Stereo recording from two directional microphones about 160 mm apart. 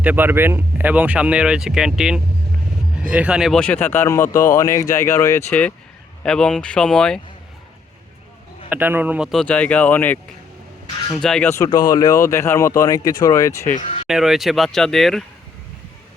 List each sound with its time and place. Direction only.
0.0 s speech: 10° right (ahead or behind); by 5.4 s 20° left (ahead or behind)
6.2 s speech: 5° left (ahead or behind)
8.7 s speech: 10° right (ahead or behind); by 11.4 s 5° left (ahead or behind)
11.4 s speech: 20° left (ahead or behind)
13.7 s speech: 45° left (ahead or behind)
14.1 s speech: centre (ahead or behind)